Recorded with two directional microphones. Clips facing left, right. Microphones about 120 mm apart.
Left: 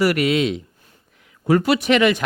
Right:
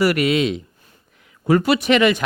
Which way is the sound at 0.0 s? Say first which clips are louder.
Right 1 dB; 20° right (ahead or behind).